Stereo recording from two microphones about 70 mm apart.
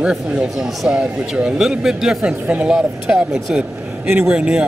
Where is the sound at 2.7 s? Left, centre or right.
Centre.